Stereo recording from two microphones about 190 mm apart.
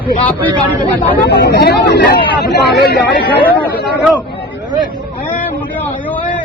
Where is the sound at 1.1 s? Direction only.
55° left (ahead or behind).